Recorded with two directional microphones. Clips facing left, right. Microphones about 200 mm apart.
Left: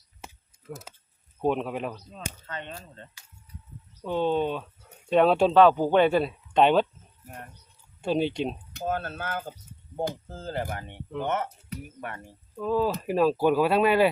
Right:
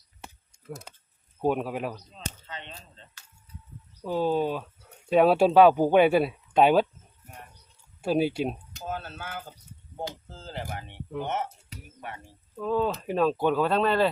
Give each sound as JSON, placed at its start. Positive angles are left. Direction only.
{"t": 0.7, "sound": "speech", "side_deg": 5}
{"t": 2.5, "sound": "speech", "side_deg": 50}
{"t": 4.0, "sound": "speech", "side_deg": -5}
{"t": 8.0, "sound": "speech", "side_deg": -5}
{"t": 8.7, "sound": "speech", "side_deg": 55}
{"t": 12.5, "sound": "speech", "side_deg": 0}